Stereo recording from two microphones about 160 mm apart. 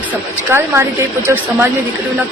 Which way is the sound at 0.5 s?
15° right (ahead or behind).